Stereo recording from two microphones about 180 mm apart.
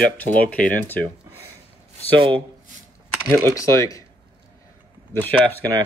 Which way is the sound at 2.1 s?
25° right (ahead or behind).